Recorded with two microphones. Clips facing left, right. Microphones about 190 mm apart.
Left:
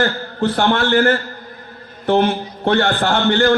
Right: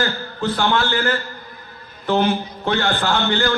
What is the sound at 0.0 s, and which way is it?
A man's voice, 55° left (ahead or behind).